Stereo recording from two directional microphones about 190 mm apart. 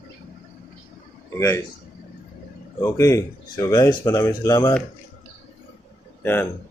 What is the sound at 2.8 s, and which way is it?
Speech, 15° left (ahead or behind).